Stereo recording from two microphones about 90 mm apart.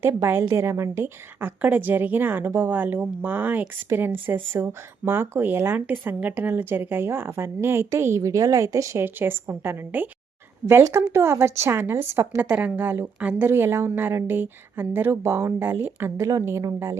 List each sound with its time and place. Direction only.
0.0 s a woman's voice: 35° right (ahead or behind)
5.8 s a woman's voice: 15° right (ahead or behind); by 9.0 s 35° right (ahead or behind)
9.0 s a woman's voice: 25° right (ahead or behind)
12.4 s a woman's voice: 15° right (ahead or behind)
16.1 s a woman's voice: 40° right (ahead or behind)